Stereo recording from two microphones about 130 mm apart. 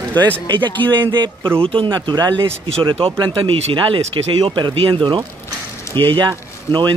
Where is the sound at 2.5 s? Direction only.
45° right (ahead or behind).